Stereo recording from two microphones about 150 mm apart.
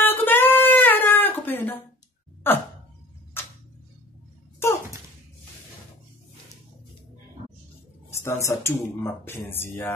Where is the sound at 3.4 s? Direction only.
15° left (ahead or behind).